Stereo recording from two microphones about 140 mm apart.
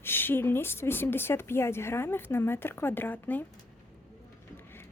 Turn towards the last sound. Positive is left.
turn(degrees=15)  # may be behind; listen again after turning